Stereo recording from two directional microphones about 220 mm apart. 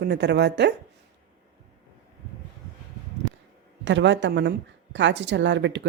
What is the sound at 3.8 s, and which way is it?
A woman's voice, 55° right (ahead or behind).